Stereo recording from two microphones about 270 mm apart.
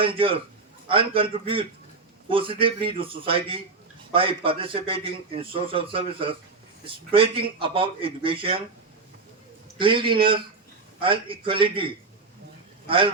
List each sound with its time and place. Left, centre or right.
0.0 s a man's voice: centre
9.7 s a man's voice: centre
12.9 s a man's voice: centre